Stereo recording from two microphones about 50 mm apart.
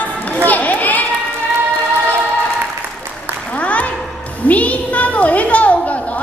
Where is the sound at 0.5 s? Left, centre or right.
Left.